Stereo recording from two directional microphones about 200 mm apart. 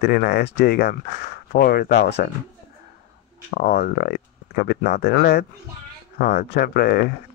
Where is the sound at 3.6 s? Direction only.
50° left (ahead or behind).